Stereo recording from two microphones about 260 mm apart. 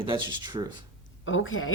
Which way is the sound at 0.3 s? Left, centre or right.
Centre.